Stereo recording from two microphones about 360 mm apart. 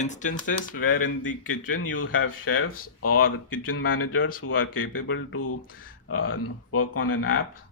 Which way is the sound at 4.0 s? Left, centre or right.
Left.